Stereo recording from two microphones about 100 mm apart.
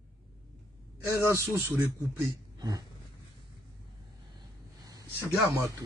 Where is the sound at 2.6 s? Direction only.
40° right (ahead or behind).